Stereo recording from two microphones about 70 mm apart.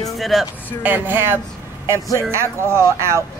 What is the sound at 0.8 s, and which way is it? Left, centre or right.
Speech, right.